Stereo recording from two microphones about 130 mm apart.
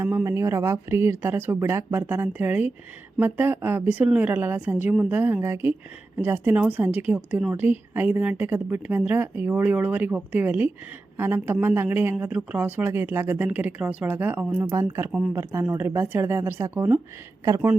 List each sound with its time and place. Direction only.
0.0 s a woman's voice: 15° right (ahead or behind)